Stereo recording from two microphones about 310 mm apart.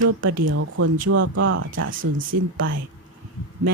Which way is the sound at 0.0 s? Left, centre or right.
Right.